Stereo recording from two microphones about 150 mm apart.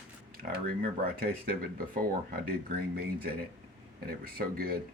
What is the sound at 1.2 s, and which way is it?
Speech, 80° right.